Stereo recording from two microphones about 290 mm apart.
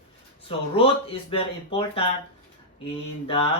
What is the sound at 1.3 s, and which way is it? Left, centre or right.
Speech, centre.